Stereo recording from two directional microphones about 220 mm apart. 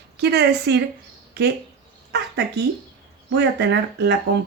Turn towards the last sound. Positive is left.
turn(degrees=-50)  # may be behind; listen again after turning